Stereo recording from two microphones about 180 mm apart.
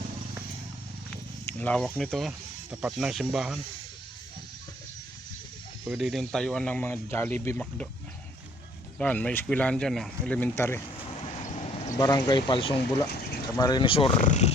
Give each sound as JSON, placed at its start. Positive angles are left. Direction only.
{"t": 1.5, "sound": "speech", "side_deg": 10}
{"t": 5.9, "sound": "speech", "side_deg": 0}
{"t": 9.0, "sound": "speech", "side_deg": 5}
{"t": 11.3, "sound": "vehicle", "side_deg": 40}
{"t": 11.9, "sound": "speech", "side_deg": 20}
{"t": 14.2, "sound": "speech", "side_deg": 40}